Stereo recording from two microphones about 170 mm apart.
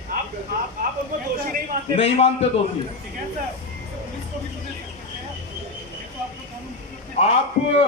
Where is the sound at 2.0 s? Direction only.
35° left (ahead or behind).